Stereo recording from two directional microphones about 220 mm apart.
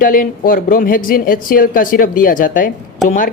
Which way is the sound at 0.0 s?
40° left (ahead or behind).